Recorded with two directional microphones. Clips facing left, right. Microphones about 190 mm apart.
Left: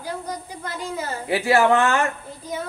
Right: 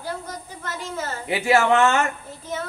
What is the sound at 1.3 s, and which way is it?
Speech, 25° right (ahead or behind).